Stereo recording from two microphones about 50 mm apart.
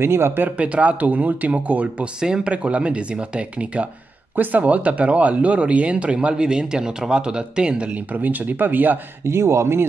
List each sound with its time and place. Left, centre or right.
0.0 s speech: right
0.6 s speech: right
2.1 s speech: centre; by 9.0 s right
9.2 s speech: right